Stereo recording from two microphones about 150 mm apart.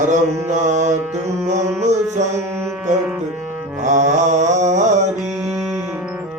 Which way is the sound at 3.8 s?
55° right (ahead or behind).